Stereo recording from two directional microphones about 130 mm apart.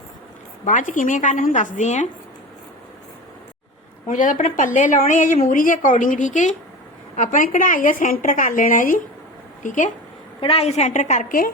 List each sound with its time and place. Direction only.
0.6 s a woman's voice: 80° left
4.0 s a woman's voice: 90° left
9.6 s a woman's voice: 75° left (ahead or behind)
10.4 s a woman's voice: 50° left (ahead or behind); by 11.5 s 90° left